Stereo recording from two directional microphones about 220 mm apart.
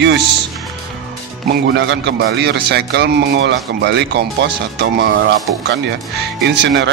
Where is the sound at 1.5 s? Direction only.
55° right (ahead or behind).